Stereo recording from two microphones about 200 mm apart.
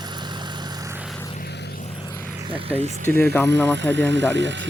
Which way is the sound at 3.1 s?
10° left (ahead or behind).